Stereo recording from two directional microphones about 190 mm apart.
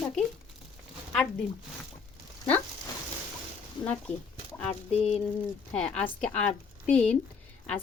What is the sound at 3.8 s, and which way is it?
Speech, 5° left (ahead or behind).